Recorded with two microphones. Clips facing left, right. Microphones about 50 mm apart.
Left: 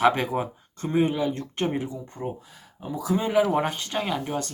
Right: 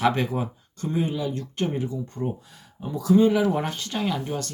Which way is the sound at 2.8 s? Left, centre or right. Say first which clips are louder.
Right 7 dB; centre.